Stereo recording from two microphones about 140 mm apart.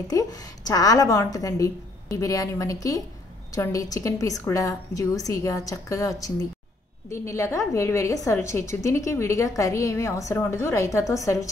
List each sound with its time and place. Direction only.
0.1 s a woman's voice: 25° left (ahead or behind)